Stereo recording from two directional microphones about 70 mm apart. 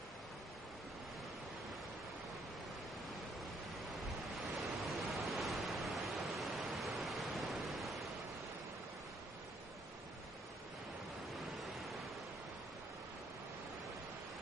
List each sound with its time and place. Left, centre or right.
4.4 s waves: centre